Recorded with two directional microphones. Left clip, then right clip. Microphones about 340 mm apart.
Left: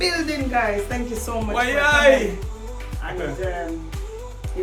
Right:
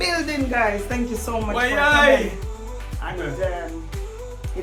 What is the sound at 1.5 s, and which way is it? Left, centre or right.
Speech, centre.